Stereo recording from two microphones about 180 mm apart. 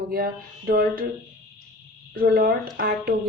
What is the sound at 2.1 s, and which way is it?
Speech, 55° right (ahead or behind).